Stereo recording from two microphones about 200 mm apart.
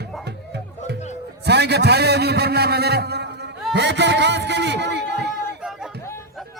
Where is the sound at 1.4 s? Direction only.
55° right (ahead or behind).